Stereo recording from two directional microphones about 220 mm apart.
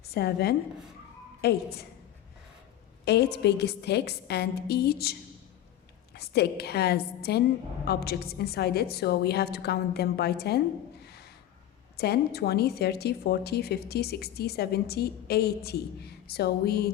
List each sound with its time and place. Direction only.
0.0 s a woman's voice: 45° left (ahead or behind)
3.0 s speech: 50° left (ahead or behind)
6.1 s speech: 45° left (ahead or behind)
11.0 s a sound: 45° left (ahead or behind)
11.9 s speech: 45° left (ahead or behind)